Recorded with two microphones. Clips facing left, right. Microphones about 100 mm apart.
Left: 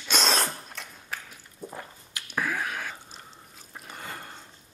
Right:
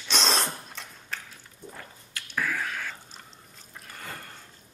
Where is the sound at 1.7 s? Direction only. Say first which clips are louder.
Left 3 dB; 15° left (ahead or behind).